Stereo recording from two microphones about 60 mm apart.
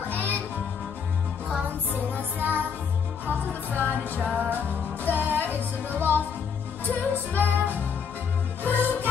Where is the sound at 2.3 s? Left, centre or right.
Right.